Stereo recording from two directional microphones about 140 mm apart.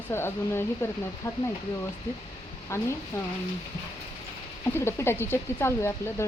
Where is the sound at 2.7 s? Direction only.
20° left (ahead or behind).